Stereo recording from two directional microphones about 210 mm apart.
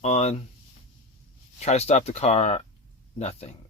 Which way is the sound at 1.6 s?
30° left (ahead or behind).